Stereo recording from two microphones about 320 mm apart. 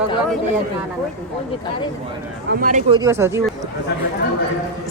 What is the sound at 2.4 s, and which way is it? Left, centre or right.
Speech, right.